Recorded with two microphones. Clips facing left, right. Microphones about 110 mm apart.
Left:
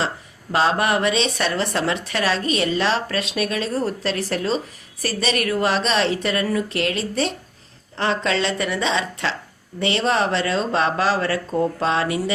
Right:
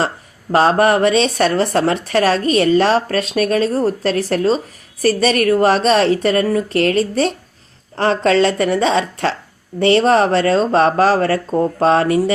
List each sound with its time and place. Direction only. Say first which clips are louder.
0.5 s speech: right 7 dB; 45° right (ahead or behind)